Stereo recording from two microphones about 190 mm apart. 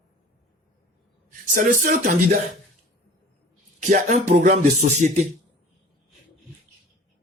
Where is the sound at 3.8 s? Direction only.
40° right (ahead or behind).